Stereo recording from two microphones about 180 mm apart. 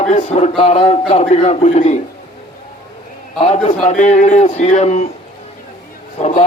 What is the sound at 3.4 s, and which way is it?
Speech, 35° left (ahead or behind).